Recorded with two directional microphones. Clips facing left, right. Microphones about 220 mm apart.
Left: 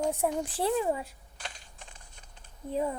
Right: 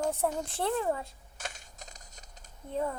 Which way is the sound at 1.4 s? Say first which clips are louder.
Right 2 dB; 45° right (ahead or behind).